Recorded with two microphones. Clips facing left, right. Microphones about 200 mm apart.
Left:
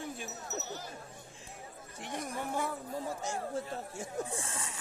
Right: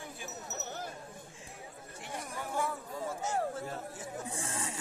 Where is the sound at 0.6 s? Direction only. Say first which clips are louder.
Right 2 dB; 55° right (ahead or behind).